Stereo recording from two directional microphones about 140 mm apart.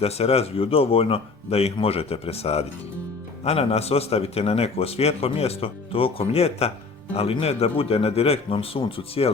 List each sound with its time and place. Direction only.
0.0 s a man's voice: 45° left (ahead or behind)